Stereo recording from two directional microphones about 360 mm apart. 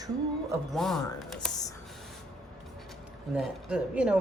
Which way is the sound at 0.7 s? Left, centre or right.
Centre.